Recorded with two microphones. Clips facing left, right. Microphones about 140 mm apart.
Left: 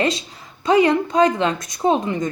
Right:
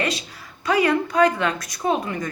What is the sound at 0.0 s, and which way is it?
A woman's voice, 25° left (ahead or behind).